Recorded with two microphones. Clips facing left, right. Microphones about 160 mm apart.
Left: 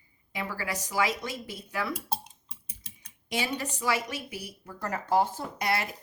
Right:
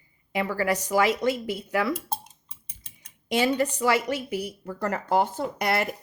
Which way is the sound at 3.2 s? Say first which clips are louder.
Right 9 dB; 60° right (ahead or behind).